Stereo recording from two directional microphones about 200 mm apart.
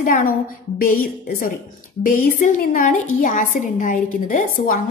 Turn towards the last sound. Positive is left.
turn(degrees=45)  # may be behind; listen again after turning